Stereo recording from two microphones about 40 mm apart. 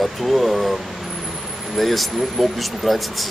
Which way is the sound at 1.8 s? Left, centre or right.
Centre.